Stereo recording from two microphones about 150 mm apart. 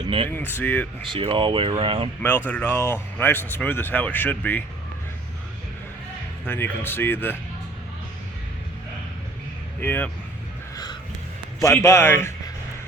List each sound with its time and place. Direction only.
0.0 s speech: 35° right (ahead or behind)
0.3 s speech: 15° left (ahead or behind)
1.1 s speech: 35° right (ahead or behind)
2.5 s speech: 15° left (ahead or behind)
6.4 s speech: 15° left (ahead or behind)
9.8 s speech: 15° left (ahead or behind)
11.6 s speech: 20° left (ahead or behind)